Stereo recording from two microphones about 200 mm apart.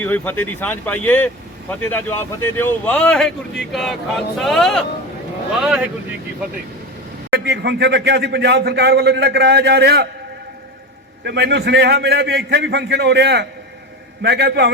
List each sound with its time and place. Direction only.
0.0 s speech: 10° left (ahead or behind)
7.3 s speech: 55° right (ahead or behind)
11.2 s speech: 55° right (ahead or behind)